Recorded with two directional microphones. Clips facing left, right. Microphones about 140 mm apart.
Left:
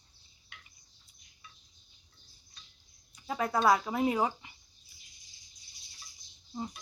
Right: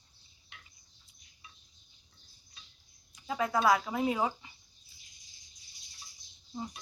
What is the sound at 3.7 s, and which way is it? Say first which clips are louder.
Speech: left 3 dB; 25° left (ahead or behind).